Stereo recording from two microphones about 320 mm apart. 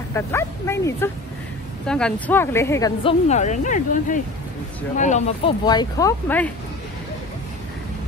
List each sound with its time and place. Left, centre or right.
0.1 s a woman's voice: centre